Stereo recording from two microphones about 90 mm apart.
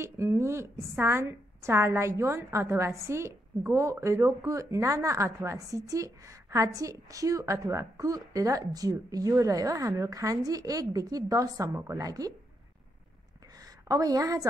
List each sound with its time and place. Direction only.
0.0 s a woman's voice: 30° right (ahead or behind)
13.6 s a woman's voice: 45° right (ahead or behind)